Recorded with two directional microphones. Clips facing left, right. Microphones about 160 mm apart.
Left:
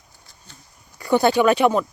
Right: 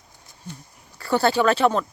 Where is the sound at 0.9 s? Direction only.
15° left (ahead or behind).